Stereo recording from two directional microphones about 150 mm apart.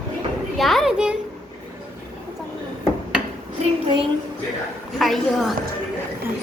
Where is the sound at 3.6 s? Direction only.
35° right (ahead or behind).